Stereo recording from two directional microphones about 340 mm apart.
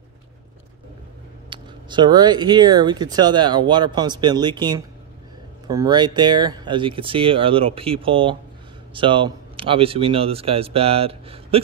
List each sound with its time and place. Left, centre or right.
1.5 s speech: centre